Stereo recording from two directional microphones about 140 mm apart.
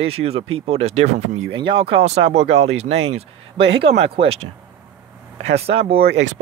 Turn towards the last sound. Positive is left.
turn(degrees=-45)  # may be behind; listen again after turning